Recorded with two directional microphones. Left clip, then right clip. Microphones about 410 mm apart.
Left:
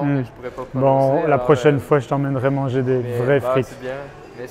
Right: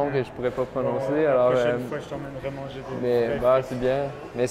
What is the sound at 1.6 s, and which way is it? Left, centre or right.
Speech, left.